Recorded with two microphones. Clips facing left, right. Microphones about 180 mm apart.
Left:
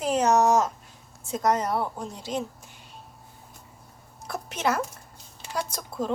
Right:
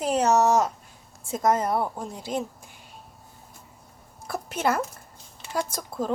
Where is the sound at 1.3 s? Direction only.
5° right (ahead or behind).